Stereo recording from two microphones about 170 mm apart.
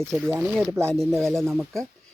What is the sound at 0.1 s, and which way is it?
Speech, 5° left (ahead or behind).